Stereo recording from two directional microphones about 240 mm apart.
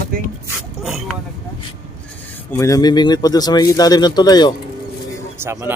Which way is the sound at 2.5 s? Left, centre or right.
Centre.